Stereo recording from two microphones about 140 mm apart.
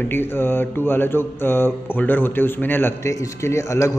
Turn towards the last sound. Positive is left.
turn(degrees=20)  # may be behind; listen again after turning